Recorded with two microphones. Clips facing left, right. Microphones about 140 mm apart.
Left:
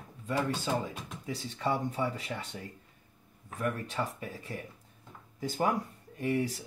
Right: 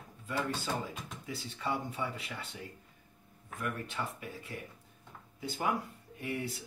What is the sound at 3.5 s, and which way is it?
Speech, 35° left (ahead or behind).